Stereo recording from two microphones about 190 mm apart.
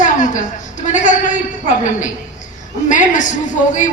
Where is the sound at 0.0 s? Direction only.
40° left (ahead or behind).